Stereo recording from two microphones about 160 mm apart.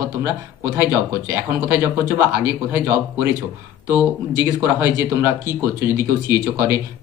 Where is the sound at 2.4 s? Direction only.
10° right (ahead or behind).